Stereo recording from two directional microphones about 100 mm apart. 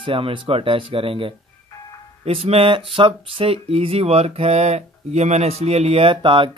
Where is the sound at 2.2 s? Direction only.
85° right; by 6.5 s 55° right (ahead or behind).